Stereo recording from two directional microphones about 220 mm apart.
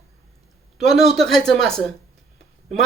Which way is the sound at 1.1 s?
Centre (ahead or behind).